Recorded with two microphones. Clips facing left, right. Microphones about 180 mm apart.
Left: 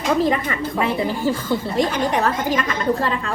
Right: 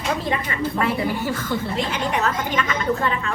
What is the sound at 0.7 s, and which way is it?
Speech, 20° left (ahead or behind).